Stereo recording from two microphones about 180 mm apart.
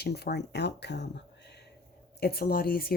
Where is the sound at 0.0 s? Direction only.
65° left (ahead or behind).